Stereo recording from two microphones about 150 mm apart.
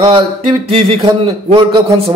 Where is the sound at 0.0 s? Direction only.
35° right (ahead or behind).